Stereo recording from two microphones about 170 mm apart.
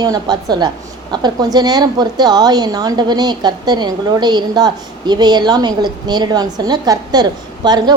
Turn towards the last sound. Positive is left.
turn(degrees=-25)  # may be behind; listen again after turning